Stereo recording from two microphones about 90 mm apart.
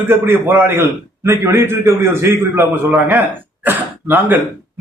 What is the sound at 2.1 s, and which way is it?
Speech, 30° right (ahead or behind).